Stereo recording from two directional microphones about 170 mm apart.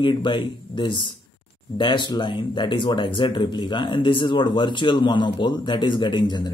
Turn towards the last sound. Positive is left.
turn(degrees=25)  # may be behind; listen again after turning